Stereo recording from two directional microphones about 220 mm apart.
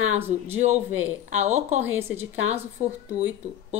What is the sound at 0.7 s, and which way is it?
Speech, 10° right (ahead or behind).